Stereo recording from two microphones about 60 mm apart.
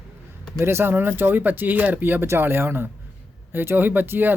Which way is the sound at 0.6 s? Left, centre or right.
Right.